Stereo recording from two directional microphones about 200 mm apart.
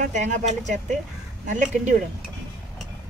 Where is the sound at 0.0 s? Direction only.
35° right (ahead or behind).